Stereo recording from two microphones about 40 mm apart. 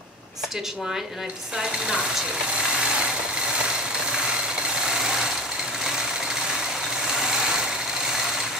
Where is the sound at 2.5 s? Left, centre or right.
Right.